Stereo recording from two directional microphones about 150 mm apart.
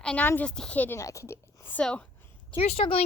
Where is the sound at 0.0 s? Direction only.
10° left (ahead or behind).